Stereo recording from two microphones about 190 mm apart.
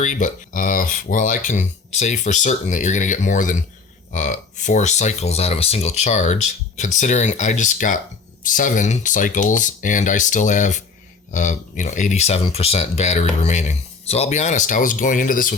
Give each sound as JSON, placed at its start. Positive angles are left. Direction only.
{"t": 0.0, "sound": "speech", "side_deg": 45}